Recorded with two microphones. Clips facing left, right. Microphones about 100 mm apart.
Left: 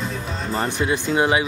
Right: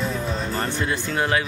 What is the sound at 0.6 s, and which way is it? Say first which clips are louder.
Speech: left 3 dB; 15° left (ahead or behind).